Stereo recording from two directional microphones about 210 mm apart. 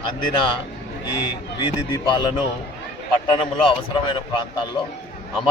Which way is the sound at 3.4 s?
25° left (ahead or behind).